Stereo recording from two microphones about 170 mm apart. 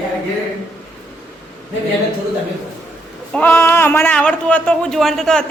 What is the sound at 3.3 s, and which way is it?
A man's voice, 10° left (ahead or behind).